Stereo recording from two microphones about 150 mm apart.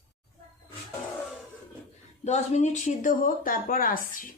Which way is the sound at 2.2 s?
50° left (ahead or behind).